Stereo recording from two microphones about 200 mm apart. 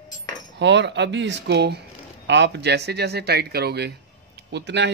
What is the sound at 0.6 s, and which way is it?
Speech, 60° right (ahead or behind).